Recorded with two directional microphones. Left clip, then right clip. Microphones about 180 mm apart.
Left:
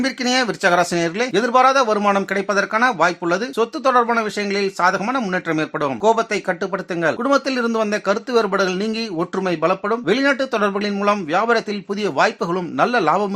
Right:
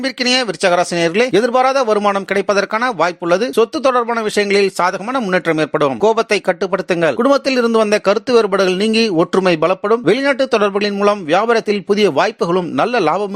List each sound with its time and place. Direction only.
0.0 s speech: 40° right (ahead or behind)